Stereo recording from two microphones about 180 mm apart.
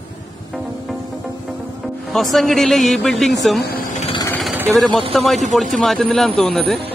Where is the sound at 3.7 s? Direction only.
45° left (ahead or behind).